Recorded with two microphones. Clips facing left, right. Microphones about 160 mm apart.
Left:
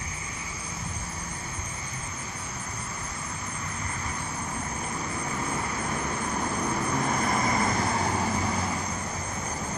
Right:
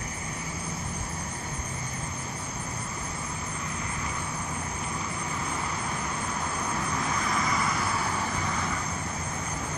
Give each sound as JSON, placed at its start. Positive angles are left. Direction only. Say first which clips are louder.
{"t": 7.2, "sound": "vehicle", "louder": "left 3 dB", "side_deg": 50}